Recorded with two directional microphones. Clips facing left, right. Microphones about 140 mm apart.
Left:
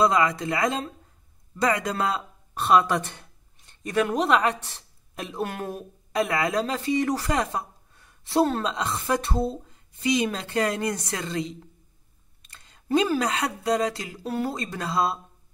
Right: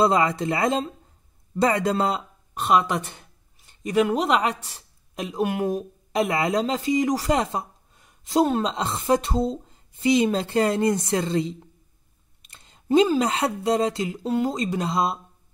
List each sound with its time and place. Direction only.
0.0 s a woman's voice: 30° right (ahead or behind)